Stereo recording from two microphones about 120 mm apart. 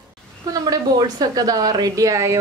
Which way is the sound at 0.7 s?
30° right (ahead or behind).